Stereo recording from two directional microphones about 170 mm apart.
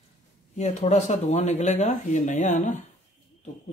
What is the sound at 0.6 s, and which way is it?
Speech, 40° left (ahead or behind).